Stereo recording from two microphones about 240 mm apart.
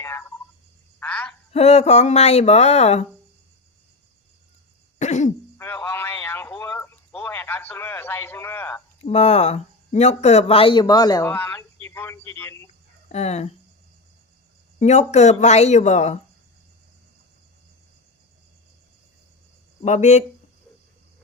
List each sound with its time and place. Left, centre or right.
0.0 s cricket: centre
0.9 s frog: centre
1.5 s speech: left
4.9 s throat clearing: left
5.5 s a sound: centre
9.0 s speech: left; by 12.6 s centre
13.1 s speech: left
14.8 s speech: left
19.8 s speech: left